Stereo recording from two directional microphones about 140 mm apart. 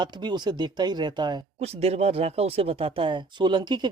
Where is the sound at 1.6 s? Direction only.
45° right (ahead or behind).